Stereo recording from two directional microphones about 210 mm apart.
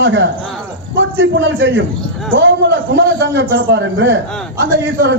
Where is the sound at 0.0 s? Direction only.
60° right (ahead or behind).